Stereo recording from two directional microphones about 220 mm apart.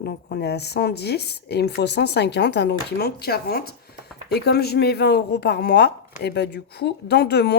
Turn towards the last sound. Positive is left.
turn(degrees=50)  # may be behind; listen again after turning